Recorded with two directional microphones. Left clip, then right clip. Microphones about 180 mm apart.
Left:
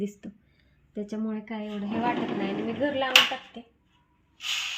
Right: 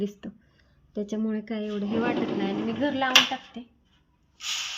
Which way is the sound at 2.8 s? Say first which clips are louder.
Right 1 dB; 10° right (ahead or behind).